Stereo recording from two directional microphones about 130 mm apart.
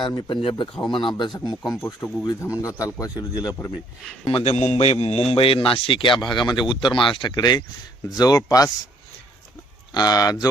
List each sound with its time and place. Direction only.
0.0 s speech: 35° left (ahead or behind)
2.0 s speech: 15° left (ahead or behind)
4.3 s a man's voice: 50° left (ahead or behind); by 8.7 s 25° left (ahead or behind)
9.9 s speech: 30° left (ahead or behind)